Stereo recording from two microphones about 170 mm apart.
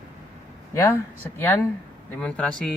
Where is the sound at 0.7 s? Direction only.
15° left (ahead or behind).